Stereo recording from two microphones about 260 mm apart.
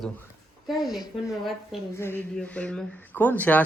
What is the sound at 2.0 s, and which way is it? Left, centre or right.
Speech, centre.